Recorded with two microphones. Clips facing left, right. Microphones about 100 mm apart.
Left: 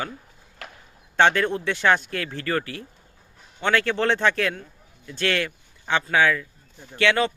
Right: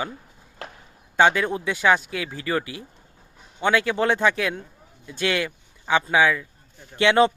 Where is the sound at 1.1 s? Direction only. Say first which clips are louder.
Even; 10° right (ahead or behind).